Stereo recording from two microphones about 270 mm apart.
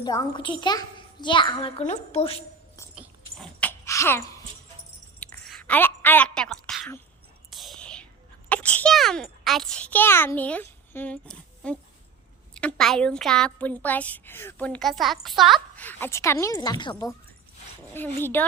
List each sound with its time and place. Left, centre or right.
0.0 s a child's voice: centre
3.0 s a sound: centre
7.5 s whispering: centre
8.4 s a child's voice: centre